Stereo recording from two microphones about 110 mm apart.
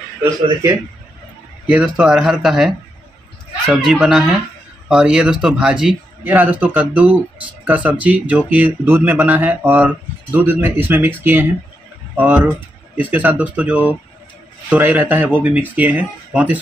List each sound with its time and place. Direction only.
0.2 s a man's voice: 30° right (ahead or behind)
1.7 s speech: 10° right (ahead or behind)